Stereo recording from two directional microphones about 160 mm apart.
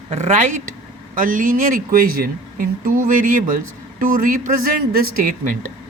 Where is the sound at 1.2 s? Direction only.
60° right (ahead or behind).